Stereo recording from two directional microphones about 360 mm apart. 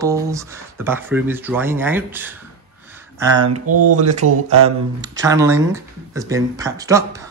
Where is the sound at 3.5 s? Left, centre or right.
Right.